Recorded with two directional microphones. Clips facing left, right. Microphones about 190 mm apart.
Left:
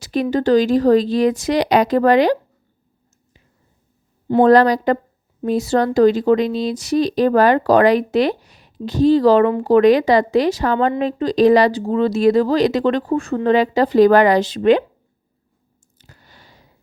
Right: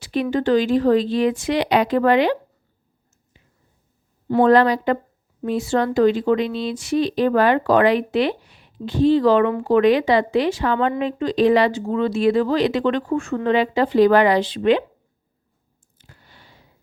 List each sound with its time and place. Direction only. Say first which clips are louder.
0.0 s speech: left 2 dB; 40° left (ahead or behind)
4.4 s speech: left 3 dB; 40° left (ahead or behind)
16.0 s a sound: left 2 dB; 40° left (ahead or behind)